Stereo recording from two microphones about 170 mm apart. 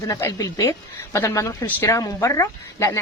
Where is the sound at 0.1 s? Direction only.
15° left (ahead or behind).